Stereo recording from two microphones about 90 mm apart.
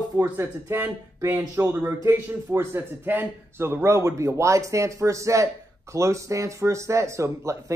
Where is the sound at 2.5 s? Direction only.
25° right (ahead or behind).